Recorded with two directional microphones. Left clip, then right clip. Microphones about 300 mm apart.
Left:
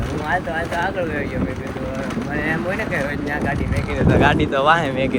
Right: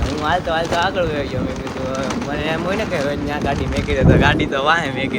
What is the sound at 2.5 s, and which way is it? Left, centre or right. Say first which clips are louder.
Speech: right 2 dB; centre.